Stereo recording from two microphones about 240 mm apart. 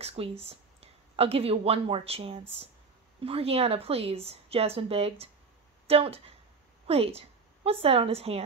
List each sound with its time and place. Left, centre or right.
0.0 s a woman's voice: right